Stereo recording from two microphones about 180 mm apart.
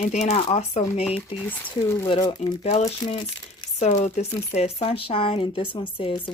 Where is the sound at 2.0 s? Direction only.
30° left (ahead or behind).